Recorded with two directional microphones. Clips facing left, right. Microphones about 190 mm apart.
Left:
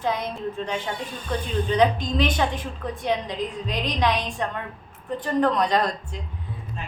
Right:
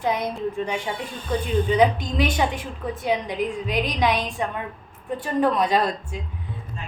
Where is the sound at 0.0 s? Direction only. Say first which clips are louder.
Right 2 dB; 10° right (ahead or behind).